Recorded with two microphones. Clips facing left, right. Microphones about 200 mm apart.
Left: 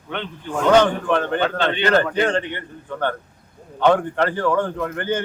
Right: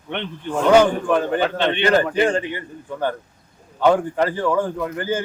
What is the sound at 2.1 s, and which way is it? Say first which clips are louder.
A man's voice: right 1 dB; 10° right (ahead or behind).